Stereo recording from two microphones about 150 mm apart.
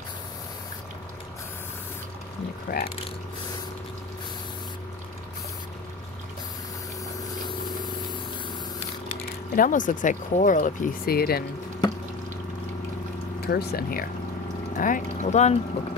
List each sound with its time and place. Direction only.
2.7 s speech: 70° left (ahead or behind)
9.6 s speech: 60° left (ahead or behind); by 11.4 s 90° left
13.5 s speech: 90° left
14.8 s speech: 55° left (ahead or behind)